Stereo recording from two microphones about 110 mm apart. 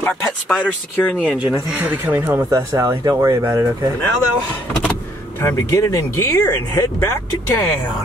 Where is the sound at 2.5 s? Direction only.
35° right (ahead or behind).